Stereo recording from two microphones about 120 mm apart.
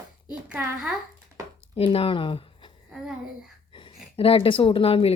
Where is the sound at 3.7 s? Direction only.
45° left (ahead or behind).